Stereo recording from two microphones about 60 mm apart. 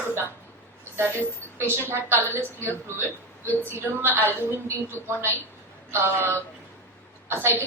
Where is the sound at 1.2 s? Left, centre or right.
Left.